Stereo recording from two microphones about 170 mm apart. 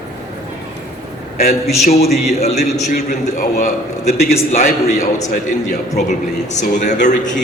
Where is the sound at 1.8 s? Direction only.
40° left (ahead or behind).